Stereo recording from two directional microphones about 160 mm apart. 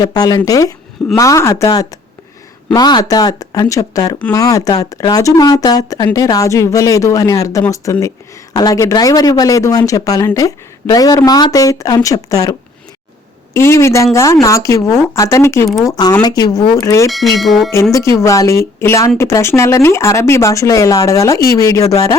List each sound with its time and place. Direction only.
0.0 s speech: 25° left (ahead or behind)
17.1 s speech: centre (ahead or behind)
17.9 s speech: 20° left (ahead or behind)